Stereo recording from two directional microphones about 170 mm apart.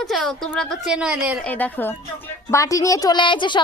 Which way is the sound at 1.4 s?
10° left (ahead or behind).